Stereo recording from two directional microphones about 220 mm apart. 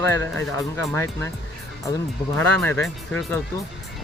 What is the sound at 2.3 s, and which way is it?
Speech, 5° left (ahead or behind).